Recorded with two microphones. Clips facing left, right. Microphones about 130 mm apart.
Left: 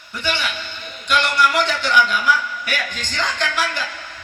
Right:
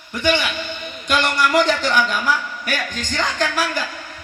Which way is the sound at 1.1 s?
45° right (ahead or behind).